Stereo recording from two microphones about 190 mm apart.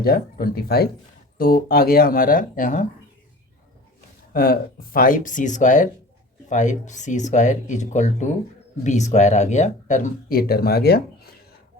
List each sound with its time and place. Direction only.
0.0 s speech: 50° left (ahead or behind)
4.4 s speech: 50° left (ahead or behind)